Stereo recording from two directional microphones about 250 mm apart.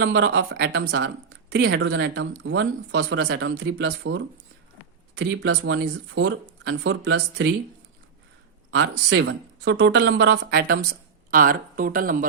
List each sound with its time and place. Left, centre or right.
0.0 s speech: right
8.7 s speech: right